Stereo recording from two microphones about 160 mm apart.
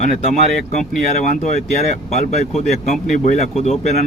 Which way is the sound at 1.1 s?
50° left (ahead or behind).